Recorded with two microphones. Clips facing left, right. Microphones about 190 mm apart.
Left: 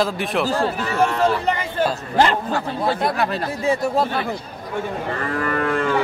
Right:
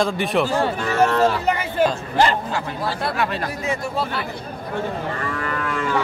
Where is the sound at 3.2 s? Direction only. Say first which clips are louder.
Left 2 dB; 35° left (ahead or behind).